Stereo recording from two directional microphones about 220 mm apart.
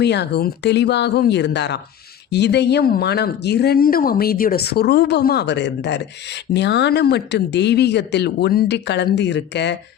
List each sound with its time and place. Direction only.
0.0 s speech: 50° left (ahead or behind)